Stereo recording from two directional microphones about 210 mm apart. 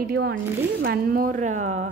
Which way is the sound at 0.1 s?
50° right (ahead or behind).